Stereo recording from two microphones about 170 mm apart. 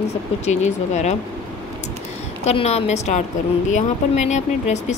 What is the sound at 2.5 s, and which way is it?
Speech, 40° left (ahead or behind).